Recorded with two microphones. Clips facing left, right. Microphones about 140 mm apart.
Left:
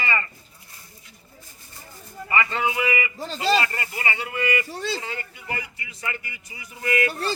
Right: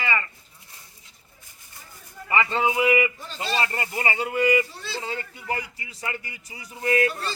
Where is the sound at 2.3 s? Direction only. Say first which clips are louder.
Right 1 dB; 20° right (ahead or behind).